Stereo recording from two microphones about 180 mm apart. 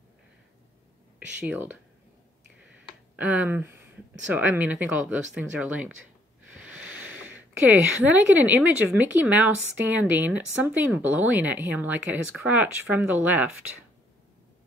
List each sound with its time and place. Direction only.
1.4 s speech: 10° right (ahead or behind)
3.2 s speech: 10° right (ahead or behind)